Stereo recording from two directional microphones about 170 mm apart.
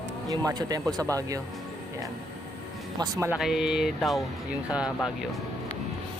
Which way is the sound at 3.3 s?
Centre (ahead or behind).